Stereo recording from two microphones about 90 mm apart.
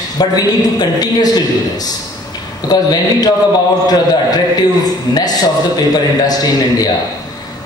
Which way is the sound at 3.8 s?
45° left (ahead or behind).